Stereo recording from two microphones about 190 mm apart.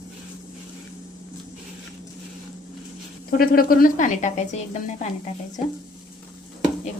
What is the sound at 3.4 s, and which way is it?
A woman's voice, 50° left (ahead or behind).